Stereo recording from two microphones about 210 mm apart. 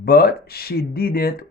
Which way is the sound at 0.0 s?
45° left (ahead or behind).